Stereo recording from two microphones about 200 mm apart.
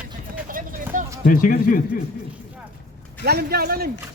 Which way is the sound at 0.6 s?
45° right (ahead or behind).